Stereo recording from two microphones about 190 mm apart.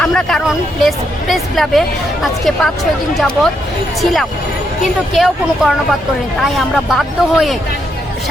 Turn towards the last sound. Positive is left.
turn(degrees=0)  # may be behind; listen again after turning